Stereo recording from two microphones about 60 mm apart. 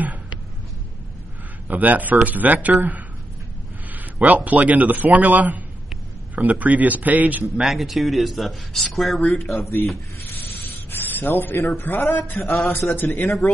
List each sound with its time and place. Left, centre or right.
0.0 s a sound: right
1.7 s a man's voice: right
3.9 s a man's voice: right
7.6 s speech: centre
9.6 s speech: left
10.3 s a sound: left
12.9 s speech: left